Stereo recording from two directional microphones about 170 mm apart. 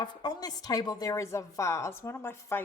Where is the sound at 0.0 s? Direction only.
25° left (ahead or behind).